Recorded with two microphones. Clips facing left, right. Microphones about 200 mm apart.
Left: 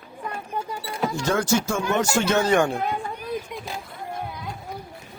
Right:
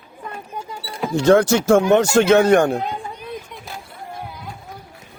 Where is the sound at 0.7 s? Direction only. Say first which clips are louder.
Right 1 dB; 10° right (ahead or behind).